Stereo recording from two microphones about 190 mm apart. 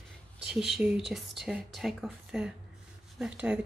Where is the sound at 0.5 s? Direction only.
5° right (ahead or behind).